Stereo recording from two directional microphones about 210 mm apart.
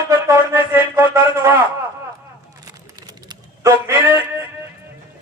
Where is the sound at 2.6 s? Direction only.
15° right (ahead or behind).